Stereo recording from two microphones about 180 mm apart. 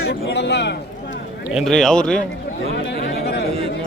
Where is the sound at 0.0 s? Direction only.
70° left (ahead or behind).